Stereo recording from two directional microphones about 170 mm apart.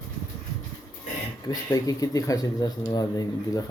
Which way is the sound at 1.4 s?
20° left (ahead or behind).